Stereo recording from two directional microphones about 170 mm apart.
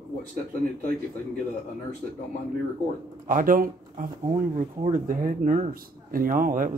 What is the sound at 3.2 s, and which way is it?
Speech, 55° right (ahead or behind).